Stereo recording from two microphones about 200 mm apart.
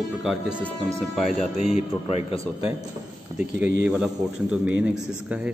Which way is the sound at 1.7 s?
30° left (ahead or behind).